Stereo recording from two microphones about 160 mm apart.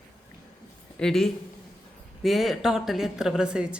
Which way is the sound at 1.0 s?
Centre (ahead or behind).